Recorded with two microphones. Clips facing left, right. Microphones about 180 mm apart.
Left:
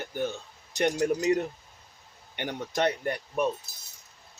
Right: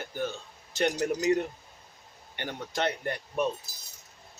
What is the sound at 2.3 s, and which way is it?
Speech, 15° left (ahead or behind).